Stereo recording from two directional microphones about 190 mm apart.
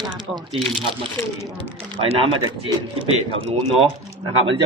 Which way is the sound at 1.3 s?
20° right (ahead or behind).